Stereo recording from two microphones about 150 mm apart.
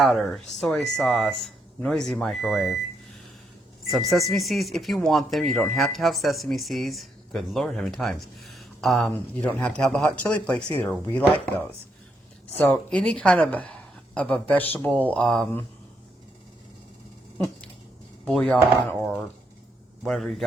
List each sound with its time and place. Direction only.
0.0 s speech: centre (ahead or behind)
3.9 s speech: centre (ahead or behind)
12.5 s a woman's voice: 10° left (ahead or behind)
18.3 s speech: 5° left (ahead or behind)